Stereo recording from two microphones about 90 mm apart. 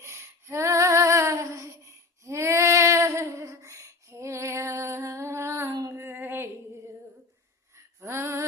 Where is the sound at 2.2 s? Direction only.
35° right (ahead or behind).